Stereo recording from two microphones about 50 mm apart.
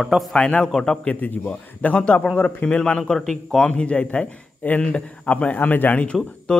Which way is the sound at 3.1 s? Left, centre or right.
Centre.